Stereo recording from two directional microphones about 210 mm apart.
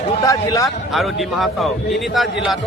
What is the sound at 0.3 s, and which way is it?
Speech, 15° left (ahead or behind).